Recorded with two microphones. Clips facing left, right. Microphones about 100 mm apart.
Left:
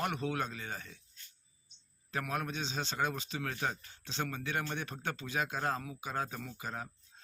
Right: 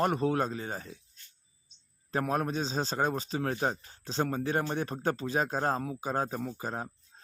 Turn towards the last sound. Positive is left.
turn(degrees=-35)  # may be behind; listen again after turning